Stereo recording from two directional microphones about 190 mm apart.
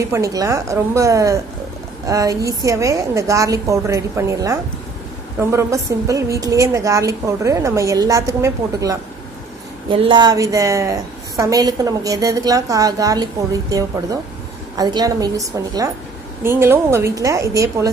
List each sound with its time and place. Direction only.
0.0 s a woman's voice: 15° right (ahead or behind)